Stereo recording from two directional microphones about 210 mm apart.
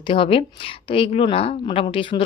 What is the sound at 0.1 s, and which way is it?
Speech, 25° left (ahead or behind).